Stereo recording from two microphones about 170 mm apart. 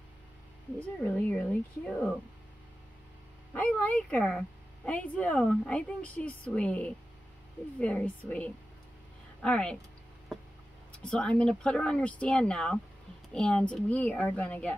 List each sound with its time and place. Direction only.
0.7 s speech: 10° left (ahead or behind)
3.5 s speech: 10° left (ahead or behind)
10.9 s speech: 5° left (ahead or behind)